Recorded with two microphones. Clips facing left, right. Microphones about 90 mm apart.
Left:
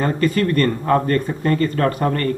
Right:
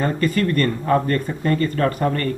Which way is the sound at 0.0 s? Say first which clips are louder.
Left 2 dB; 45° left (ahead or behind).